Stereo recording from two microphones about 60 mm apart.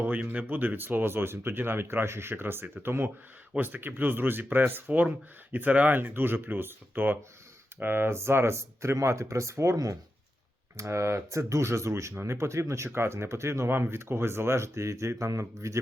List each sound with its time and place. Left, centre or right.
0.0 s speech: right
10.8 s speech: right
13.7 s speech: right